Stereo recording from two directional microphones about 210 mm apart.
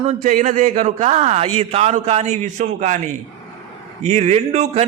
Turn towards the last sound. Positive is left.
turn(degrees=-30)  # may be behind; listen again after turning